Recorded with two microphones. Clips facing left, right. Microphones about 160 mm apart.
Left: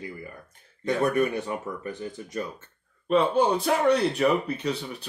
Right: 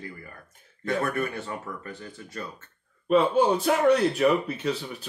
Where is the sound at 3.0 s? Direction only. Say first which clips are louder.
Right 1 dB; 5° right (ahead or behind).